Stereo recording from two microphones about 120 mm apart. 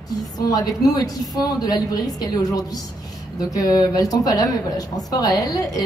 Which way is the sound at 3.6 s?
30° left (ahead or behind).